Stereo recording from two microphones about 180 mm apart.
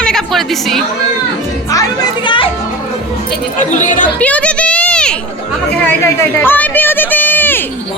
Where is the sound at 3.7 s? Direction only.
45° left (ahead or behind).